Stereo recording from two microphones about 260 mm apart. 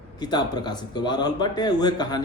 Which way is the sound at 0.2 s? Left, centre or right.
Centre.